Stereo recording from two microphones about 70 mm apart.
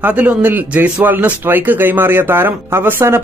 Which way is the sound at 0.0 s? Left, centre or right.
Right.